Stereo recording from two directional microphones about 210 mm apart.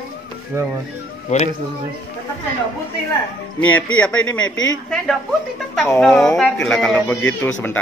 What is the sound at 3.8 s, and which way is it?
Speech, 5° left (ahead or behind).